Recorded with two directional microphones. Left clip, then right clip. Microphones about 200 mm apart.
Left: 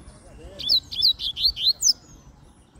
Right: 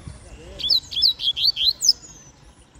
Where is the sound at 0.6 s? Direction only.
Centre (ahead or behind).